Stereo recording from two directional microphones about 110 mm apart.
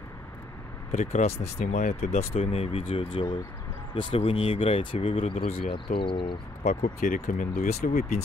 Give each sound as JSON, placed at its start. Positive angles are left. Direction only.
{"t": 0.9, "sound": "speech", "side_deg": 85}
{"t": 6.6, "sound": "speech", "side_deg": 90}